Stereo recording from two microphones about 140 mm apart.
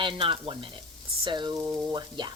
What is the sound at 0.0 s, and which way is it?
Speech, 40° right (ahead or behind).